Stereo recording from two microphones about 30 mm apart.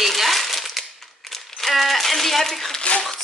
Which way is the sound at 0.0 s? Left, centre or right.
Centre.